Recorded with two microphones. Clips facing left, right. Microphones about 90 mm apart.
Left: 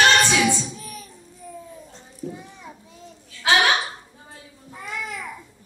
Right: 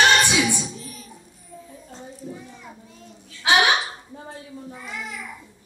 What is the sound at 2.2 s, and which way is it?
Children playing, 65° left (ahead or behind).